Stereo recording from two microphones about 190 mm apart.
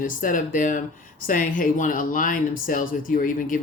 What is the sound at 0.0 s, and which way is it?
Speech, 45° left (ahead or behind).